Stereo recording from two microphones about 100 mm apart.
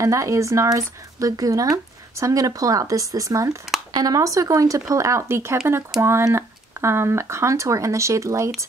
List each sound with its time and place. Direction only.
0.0 s speech: 35° right (ahead or behind)